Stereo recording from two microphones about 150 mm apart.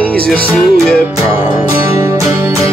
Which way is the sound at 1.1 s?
15° right (ahead or behind).